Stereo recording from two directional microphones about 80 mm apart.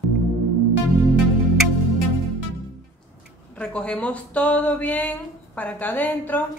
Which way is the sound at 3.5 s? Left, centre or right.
Centre.